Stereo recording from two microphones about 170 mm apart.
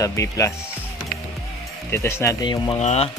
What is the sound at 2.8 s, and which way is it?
Speech, 40° left (ahead or behind).